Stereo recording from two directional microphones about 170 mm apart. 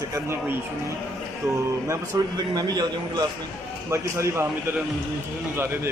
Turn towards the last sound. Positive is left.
turn(degrees=-15)  # may be behind; listen again after turning